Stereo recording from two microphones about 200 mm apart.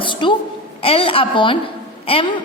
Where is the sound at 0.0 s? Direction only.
25° left (ahead or behind).